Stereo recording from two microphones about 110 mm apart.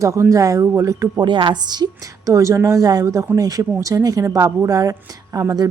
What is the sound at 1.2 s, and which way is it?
A woman's voice, 45° right (ahead or behind).